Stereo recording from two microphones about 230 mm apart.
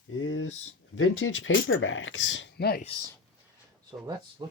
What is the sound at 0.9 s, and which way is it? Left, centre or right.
Speech, left.